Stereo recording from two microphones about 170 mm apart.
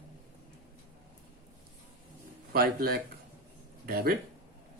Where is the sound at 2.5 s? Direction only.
60° right (ahead or behind).